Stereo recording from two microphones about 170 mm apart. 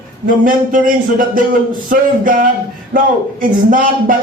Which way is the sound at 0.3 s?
55° right (ahead or behind).